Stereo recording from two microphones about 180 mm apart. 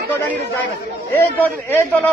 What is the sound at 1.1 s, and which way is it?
A man's voice, 10° left (ahead or behind).